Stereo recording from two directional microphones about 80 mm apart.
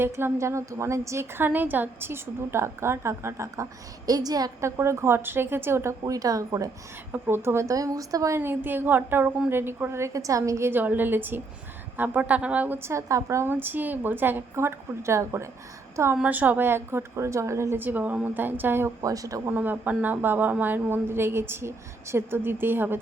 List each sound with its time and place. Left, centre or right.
0.0 s a woman's voice: right
4.6 s a woman's voice: right
7.1 s a woman's voice: right
8.4 s a woman's voice: right
10.7 s a woman's voice: right
12.9 s a woman's voice: right
16.2 s a woman's voice: right
17.7 s a woman's voice: right
19.0 s speech: right
19.5 s a woman's voice: right